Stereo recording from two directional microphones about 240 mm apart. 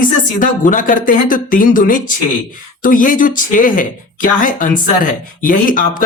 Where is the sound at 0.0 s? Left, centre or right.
Left.